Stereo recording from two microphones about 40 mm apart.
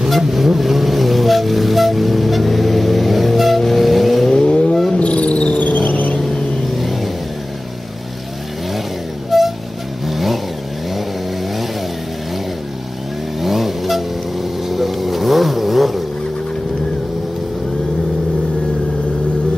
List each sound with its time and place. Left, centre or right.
0.1 s vehicle: centre
4.3 s vehicle: left
4.9 s a sound: left
6.8 s vehicle: centre
9.3 s music: centre
10.0 s vehicle: centre
13.4 s vehicle: centre